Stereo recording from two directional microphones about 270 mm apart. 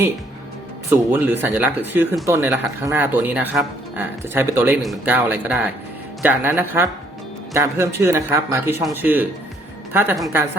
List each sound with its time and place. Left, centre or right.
0.9 s speech: centre